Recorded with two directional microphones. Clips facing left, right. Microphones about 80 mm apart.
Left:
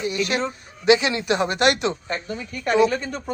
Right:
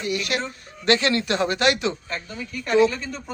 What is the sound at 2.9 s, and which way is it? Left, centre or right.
Speech, left.